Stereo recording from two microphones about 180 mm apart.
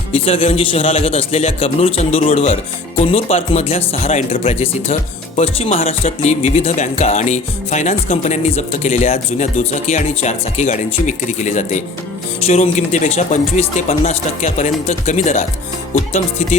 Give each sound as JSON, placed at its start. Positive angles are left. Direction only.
{"t": 0.1, "sound": "speech", "side_deg": 35}